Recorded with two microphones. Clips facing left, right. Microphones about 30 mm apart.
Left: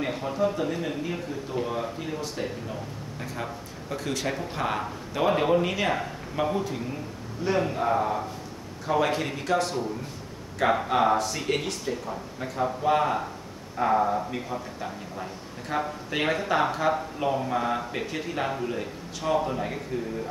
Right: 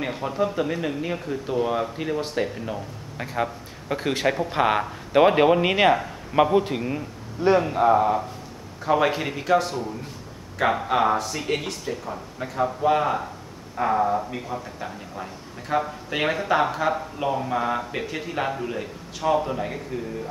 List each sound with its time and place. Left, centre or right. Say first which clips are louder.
0.0 s a sound: right 2 dB; centre
0.6 s speech: right 3 dB; right
1.6 s speech: right 6 dB; centre
2.0 s speech: right 6 dB; right
7.4 s speech: right 8 dB; right
7.7 s speech: right 6 dB; centre
10.9 s speech: right 1 dB; centre